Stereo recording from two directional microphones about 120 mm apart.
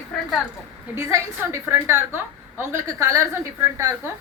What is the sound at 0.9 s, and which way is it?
A woman's voice, 20° right (ahead or behind).